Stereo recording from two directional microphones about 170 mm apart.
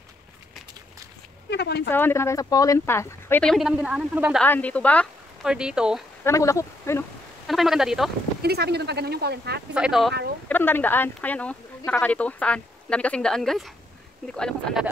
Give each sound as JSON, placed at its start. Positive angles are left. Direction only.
{"t": 1.5, "sound": "speech", "side_deg": 80}
{"t": 1.9, "sound": "speech", "side_deg": 10}
{"t": 3.5, "sound": "a woman's voice", "side_deg": -5}
{"t": 4.4, "sound": "speech", "side_deg": 10}
{"t": 5.5, "sound": "a woman's voice", "side_deg": -5}
{"t": 6.2, "sound": "speech", "side_deg": 15}
{"t": 7.4, "sound": "a woman's voice", "side_deg": 0}
{"t": 8.4, "sound": "speech", "side_deg": -70}
{"t": 9.8, "sound": "a woman's voice", "side_deg": 0}
{"t": 10.5, "sound": "a woman's voice", "side_deg": 10}